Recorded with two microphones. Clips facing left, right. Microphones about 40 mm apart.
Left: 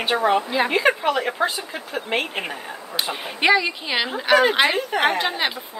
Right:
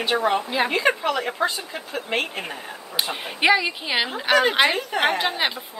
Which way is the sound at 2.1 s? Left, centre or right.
Left.